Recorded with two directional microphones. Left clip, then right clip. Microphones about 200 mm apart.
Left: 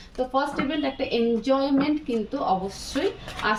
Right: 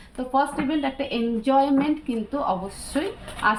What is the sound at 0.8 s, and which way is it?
Speech, 20° right (ahead or behind).